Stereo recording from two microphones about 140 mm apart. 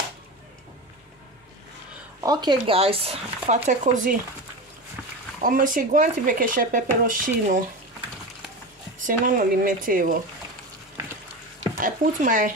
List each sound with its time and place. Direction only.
2.2 s speech: 30° right (ahead or behind); by 4.2 s 70° right (ahead or behind)
5.4 s speech: 75° right (ahead or behind)
9.0 s speech: 80° right
11.8 s speech: 70° right (ahead or behind)